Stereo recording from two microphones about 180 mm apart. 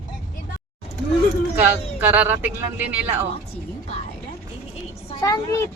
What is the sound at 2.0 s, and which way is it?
Speech, 10° right (ahead or behind).